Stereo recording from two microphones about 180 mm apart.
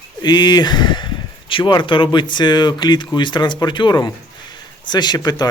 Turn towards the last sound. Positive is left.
turn(degrees=20)  # may be behind; listen again after turning